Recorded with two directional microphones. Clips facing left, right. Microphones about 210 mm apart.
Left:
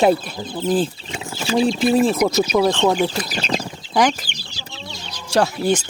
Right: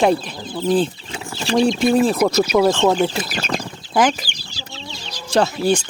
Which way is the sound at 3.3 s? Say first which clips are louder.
Left 1 dB; 20° left (ahead or behind).